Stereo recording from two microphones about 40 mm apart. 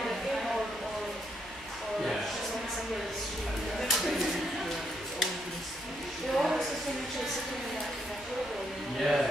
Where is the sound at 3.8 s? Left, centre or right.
Centre.